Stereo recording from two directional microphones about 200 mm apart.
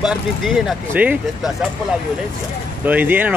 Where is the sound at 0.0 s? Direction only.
Centre (ahead or behind).